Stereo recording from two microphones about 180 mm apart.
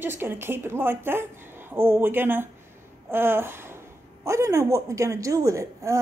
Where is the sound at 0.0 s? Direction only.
10° right (ahead or behind).